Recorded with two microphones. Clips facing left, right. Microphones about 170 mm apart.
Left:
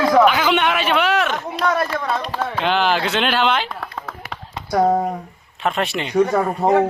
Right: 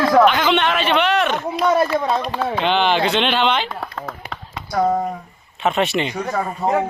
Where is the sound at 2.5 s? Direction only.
5° left (ahead or behind).